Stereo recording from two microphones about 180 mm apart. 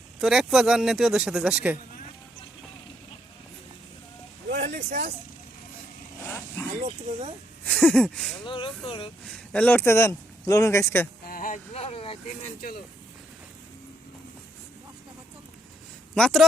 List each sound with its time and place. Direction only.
0.2 s speech: centre (ahead or behind)
4.7 s speech: 40° right (ahead or behind)
6.7 s speech: 40° right (ahead or behind)
7.6 s speech: 5° left (ahead or behind)
8.4 s speech: 30° left (ahead or behind)
9.2 s speech: 5° left (ahead or behind)
11.3 s speech: 50° left (ahead or behind); by 12.1 s 35° left (ahead or behind)
16.1 s speech: 5° left (ahead or behind)